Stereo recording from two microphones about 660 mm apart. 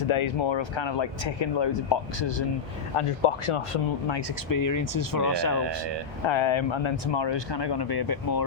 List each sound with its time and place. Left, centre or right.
0.1 s speech: left
2.9 s speech: left
4.4 s speech: left
6.2 s speech: left